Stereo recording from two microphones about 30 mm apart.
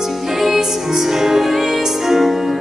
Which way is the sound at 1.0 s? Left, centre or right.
Centre.